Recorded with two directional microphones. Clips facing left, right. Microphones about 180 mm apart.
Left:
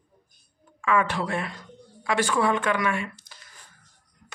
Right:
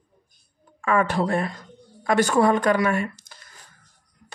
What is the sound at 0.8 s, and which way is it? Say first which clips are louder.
Speech: right 3 dB; 40° right (ahead or behind).